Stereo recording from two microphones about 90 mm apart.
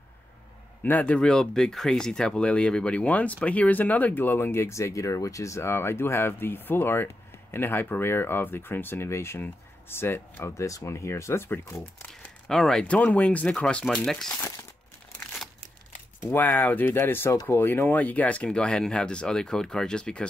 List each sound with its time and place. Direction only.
0.8 s speech: 20° left (ahead or behind)
10.6 s speech: 35° left (ahead or behind)
12.4 s speech: 5° left (ahead or behind)
16.3 s speech: 20° left (ahead or behind)